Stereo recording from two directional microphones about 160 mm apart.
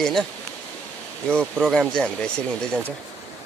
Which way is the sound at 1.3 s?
15° right (ahead or behind).